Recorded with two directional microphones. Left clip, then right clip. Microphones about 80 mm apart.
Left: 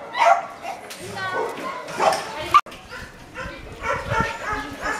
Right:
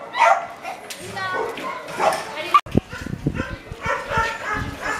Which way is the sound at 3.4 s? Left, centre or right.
Centre.